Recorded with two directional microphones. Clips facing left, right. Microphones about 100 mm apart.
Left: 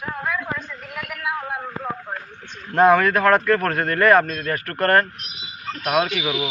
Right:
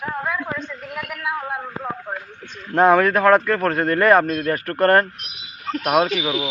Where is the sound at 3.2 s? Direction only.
5° right (ahead or behind).